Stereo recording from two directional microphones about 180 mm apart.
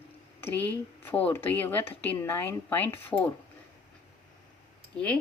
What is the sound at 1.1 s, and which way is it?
Speech, 10° left (ahead or behind).